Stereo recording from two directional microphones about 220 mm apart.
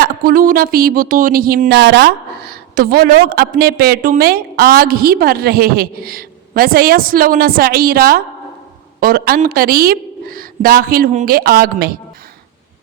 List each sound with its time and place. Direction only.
0.0 s speech: 40° right (ahead or behind)